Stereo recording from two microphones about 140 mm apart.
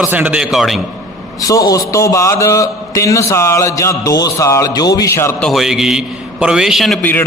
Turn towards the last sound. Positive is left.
turn(degrees=0)  # may be behind; listen again after turning